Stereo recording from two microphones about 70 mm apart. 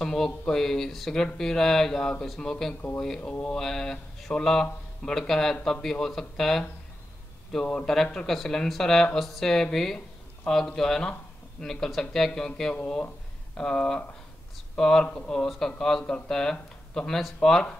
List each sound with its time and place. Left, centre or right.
0.0 s speech: centre
12.7 s speech: left
13.6 s speech: centre